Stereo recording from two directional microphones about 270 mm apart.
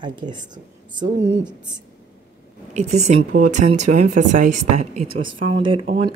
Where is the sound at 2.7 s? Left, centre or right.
Right.